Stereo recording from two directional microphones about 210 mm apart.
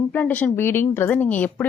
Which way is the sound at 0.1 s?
5° left (ahead or behind).